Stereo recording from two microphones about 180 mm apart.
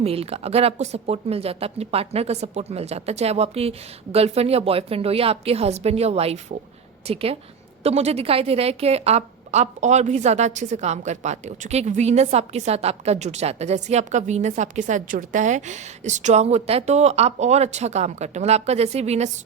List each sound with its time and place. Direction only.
0.0 s a woman's voice: 35° right (ahead or behind)